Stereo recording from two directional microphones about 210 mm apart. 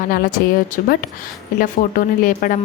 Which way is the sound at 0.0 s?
40° left (ahead or behind).